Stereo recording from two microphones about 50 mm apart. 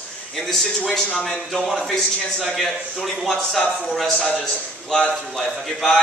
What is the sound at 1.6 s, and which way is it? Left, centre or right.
A man's voice, centre.